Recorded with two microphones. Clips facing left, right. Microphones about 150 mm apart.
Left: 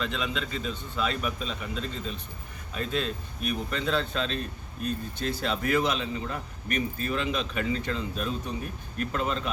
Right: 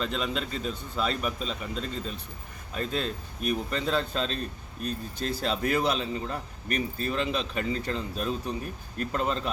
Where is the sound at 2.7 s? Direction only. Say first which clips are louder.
Even; 40° right (ahead or behind).